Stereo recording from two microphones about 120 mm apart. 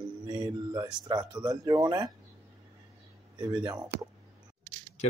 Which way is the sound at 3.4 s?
40° right (ahead or behind).